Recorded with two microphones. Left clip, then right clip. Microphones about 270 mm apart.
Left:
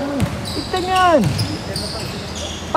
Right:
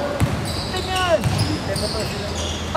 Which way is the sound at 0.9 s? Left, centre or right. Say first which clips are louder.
Left 6 dB; centre.